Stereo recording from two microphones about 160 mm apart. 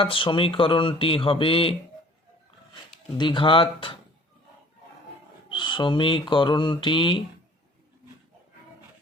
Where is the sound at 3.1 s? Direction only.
30° left (ahead or behind).